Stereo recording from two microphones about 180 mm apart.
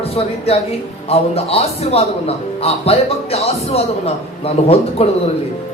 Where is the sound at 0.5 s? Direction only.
35° left (ahead or behind).